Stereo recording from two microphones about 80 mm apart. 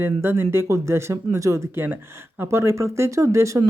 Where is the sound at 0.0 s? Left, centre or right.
Right.